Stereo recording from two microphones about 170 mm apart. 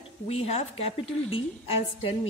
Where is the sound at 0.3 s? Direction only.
35° left (ahead or behind).